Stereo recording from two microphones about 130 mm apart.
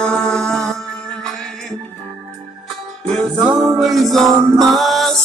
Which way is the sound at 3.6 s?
Centre (ahead or behind).